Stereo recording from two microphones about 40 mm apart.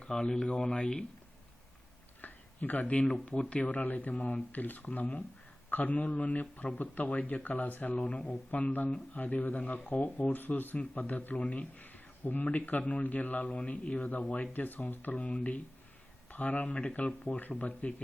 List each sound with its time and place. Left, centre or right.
0.0 s speech: centre
2.2 s a sound: left
3.5 s speech: left
7.9 s speech: left
8.4 s speech: left
11.3 s speech: left
11.8 s speech: left
13.4 s speech: left
14.5 s speech: left
15.1 s speech: left
16.3 s speech: left
16.6 s speech: left
17.2 s speech: left